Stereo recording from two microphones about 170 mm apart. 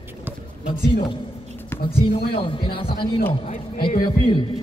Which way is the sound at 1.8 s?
30° left (ahead or behind).